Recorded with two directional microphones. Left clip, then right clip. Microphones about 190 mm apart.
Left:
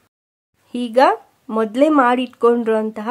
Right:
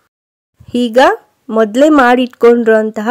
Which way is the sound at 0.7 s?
30° right (ahead or behind).